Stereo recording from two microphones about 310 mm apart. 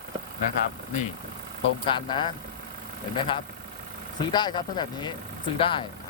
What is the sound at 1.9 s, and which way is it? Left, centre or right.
Speech, centre.